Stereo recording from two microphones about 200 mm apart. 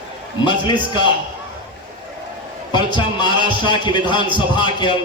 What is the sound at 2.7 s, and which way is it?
Speech, 20° left (ahead or behind).